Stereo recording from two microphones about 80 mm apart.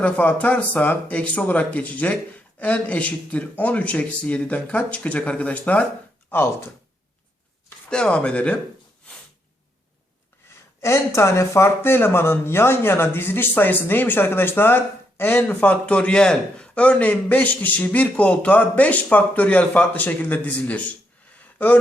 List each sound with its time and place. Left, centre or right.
0.0 s a man's voice: centre
6.3 s a man's voice: left
7.9 s a man's voice: centre
10.8 s a man's voice: left; by 20.8 s centre
21.3 s a sound: left